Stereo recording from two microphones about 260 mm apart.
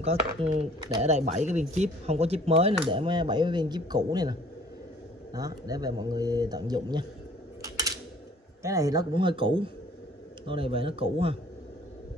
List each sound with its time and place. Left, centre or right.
0.0 s speech: right
7.6 s a sound: centre
8.6 s speech: centre